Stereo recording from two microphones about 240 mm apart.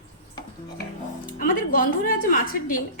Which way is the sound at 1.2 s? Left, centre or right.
Left.